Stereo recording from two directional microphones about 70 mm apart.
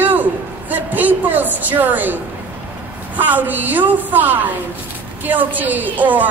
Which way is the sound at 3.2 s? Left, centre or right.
Right.